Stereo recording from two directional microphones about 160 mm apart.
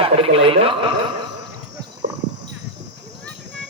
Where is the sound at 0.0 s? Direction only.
35° right (ahead or behind).